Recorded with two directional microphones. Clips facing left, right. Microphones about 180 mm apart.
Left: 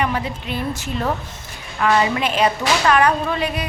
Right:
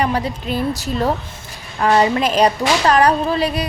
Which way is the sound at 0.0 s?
35° right (ahead or behind).